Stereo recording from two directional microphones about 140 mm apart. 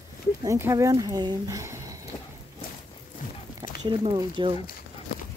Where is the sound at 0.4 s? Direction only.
20° right (ahead or behind).